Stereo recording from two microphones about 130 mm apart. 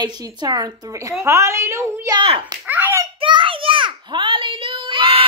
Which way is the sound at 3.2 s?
40° right (ahead or behind).